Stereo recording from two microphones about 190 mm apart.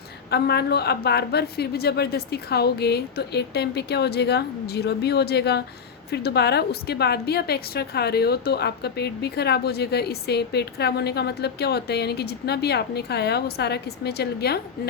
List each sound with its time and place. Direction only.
0.3 s a woman's voice: 60° left (ahead or behind)